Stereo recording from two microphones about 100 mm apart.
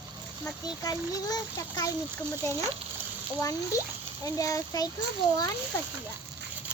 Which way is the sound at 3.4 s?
35° left (ahead or behind).